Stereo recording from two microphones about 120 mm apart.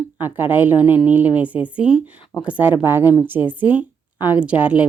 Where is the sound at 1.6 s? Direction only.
10° right (ahead or behind).